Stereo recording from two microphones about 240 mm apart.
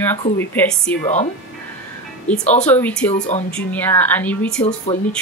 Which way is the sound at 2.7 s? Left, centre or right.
Centre.